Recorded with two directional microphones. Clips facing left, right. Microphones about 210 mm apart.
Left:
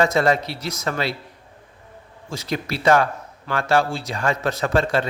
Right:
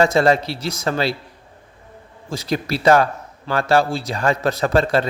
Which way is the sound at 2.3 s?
35° right (ahead or behind).